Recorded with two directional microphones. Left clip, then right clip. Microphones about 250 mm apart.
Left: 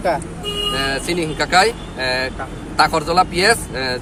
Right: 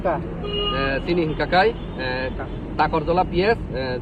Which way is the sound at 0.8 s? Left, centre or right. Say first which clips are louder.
Left 2 dB; centre.